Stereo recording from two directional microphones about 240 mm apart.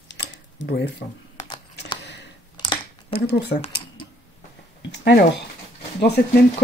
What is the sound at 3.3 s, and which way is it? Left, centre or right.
Speech, left.